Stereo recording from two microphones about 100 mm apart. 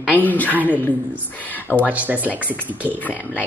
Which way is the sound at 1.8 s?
15° right (ahead or behind).